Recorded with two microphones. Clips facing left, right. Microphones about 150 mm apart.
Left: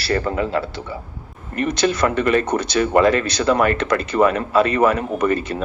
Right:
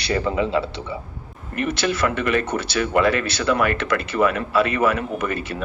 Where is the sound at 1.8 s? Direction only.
35° left (ahead or behind).